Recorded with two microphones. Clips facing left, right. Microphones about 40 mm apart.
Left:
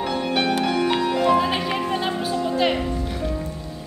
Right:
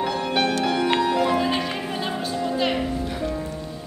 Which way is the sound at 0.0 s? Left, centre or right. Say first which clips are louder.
Even; centre.